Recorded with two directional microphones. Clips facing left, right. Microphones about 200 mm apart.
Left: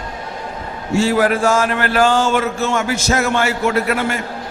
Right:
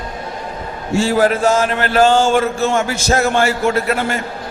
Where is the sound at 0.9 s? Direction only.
30° right (ahead or behind).